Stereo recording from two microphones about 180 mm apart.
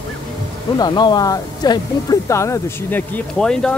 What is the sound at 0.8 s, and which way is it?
Speech, 25° left (ahead or behind).